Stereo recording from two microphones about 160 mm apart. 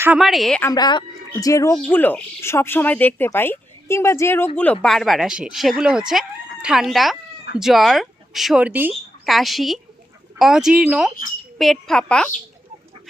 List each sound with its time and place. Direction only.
0.0 s speech: 5° right (ahead or behind)
0.6 s a woman's voice: 25° left (ahead or behind)
1.7 s speech: 10° left (ahead or behind)